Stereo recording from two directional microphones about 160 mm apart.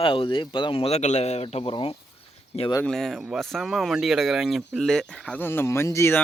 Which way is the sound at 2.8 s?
Centre (ahead or behind).